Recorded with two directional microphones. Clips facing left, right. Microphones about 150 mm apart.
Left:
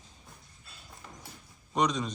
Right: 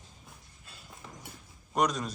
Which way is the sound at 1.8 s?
5° right (ahead or behind).